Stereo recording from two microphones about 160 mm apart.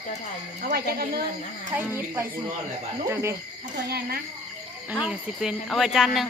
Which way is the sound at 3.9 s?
75° right (ahead or behind).